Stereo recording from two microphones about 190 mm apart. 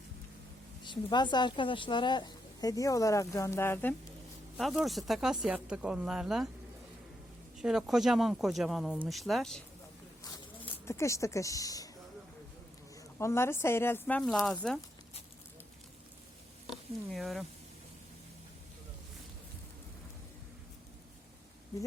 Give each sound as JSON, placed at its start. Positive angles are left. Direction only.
{"t": 0.9, "sound": "a woman's voice", "side_deg": 25}
{"t": 4.5, "sound": "speech", "side_deg": 0}
{"t": 7.6, "sound": "speech", "side_deg": 0}
{"t": 10.8, "sound": "speech", "side_deg": 15}
{"t": 13.1, "sound": "speech", "side_deg": 15}
{"t": 17.1, "sound": "speech", "side_deg": 0}